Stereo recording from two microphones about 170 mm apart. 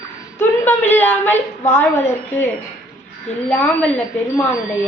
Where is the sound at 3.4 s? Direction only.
10° left (ahead or behind).